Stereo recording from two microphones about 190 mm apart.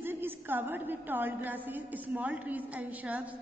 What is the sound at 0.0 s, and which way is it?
A woman's voice, 10° right (ahead or behind).